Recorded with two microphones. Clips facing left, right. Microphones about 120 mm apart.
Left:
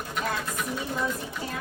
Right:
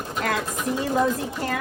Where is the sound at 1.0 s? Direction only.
90° right.